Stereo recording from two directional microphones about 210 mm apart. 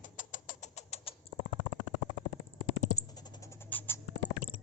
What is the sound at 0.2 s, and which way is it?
Rodents, 40° left (ahead or behind).